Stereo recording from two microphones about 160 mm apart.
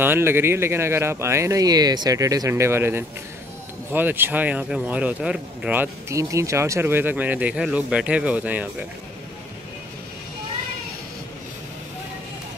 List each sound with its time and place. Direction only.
0.0 s speech: 15° right (ahead or behind)